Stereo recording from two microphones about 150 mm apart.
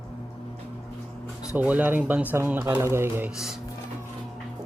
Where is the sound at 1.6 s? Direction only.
10° right (ahead or behind).